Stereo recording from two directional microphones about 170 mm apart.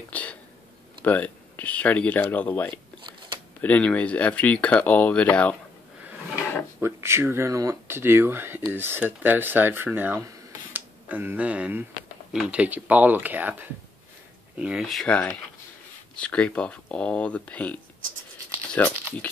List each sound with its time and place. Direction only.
0.1 s a sound: 10° left (ahead or behind)
1.0 s speech: 10° left (ahead or behind)
2.7 s a sound: 25° right (ahead or behind)
3.6 s speech: 10° left (ahead or behind)
6.8 s speech: 15° right (ahead or behind); by 17.7 s 10° left (ahead or behind)
18.8 s speech: 10° left (ahead or behind)